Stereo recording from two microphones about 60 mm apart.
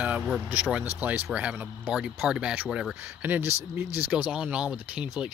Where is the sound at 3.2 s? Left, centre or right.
Right.